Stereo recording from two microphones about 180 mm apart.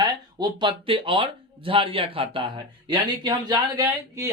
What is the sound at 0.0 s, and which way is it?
Speech, 25° right (ahead or behind).